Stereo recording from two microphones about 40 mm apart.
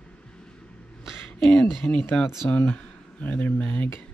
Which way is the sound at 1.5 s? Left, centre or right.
Left.